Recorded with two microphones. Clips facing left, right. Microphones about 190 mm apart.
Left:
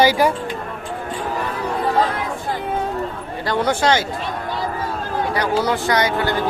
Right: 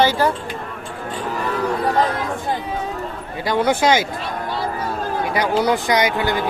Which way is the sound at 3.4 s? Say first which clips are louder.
Right 1 dB; 15° right (ahead or behind).